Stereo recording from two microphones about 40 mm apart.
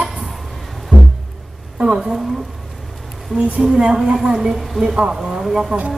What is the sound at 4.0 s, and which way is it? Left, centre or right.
Speech, centre.